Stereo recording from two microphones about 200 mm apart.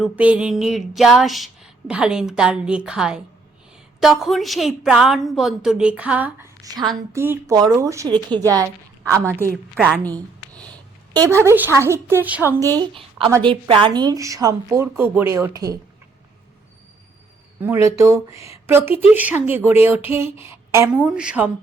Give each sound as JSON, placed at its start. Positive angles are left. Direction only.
{"t": 0.0, "sound": "a sound", "side_deg": -5}
{"t": 7.1, "sound": "a woman's voice", "side_deg": -15}
{"t": 9.7, "sound": "a woman's voice", "side_deg": 5}
{"t": 11.1, "sound": "speech", "side_deg": -15}
{"t": 12.7, "sound": "a woman's voice", "side_deg": -25}
{"t": 17.6, "sound": "speech", "side_deg": -10}